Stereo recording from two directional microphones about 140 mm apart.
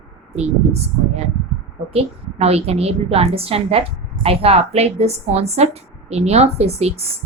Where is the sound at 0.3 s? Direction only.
50° right (ahead or behind).